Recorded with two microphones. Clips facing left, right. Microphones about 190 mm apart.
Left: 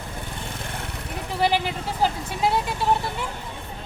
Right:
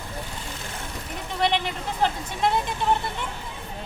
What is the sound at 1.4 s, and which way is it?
Speech, 5° left (ahead or behind).